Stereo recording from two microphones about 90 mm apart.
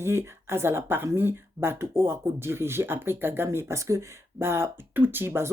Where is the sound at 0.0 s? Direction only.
30° right (ahead or behind).